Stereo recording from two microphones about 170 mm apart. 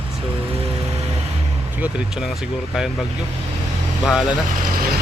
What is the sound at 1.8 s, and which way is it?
Speech, 5° right (ahead or behind).